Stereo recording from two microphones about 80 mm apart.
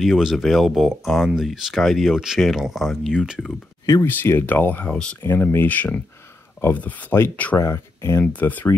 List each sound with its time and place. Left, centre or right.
0.0 s speech: centre
4.0 s speech: left
7.5 s speech: left
8.3 s speech: left